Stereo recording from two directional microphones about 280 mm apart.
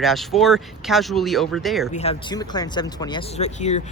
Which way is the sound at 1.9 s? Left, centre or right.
Centre.